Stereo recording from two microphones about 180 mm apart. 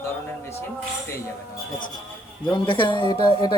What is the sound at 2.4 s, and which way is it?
Speech, 25° left (ahead or behind).